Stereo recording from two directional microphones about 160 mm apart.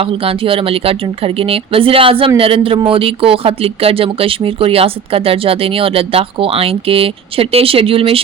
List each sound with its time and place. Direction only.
0.0 s speech: 35° right (ahead or behind)